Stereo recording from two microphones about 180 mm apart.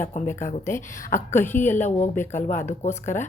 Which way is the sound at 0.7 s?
15° left (ahead or behind).